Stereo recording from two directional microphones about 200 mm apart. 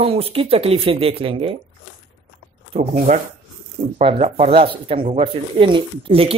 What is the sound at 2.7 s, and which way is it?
Speech, 35° right (ahead or behind).